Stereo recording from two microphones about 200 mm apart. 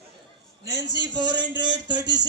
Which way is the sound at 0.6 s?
15° right (ahead or behind).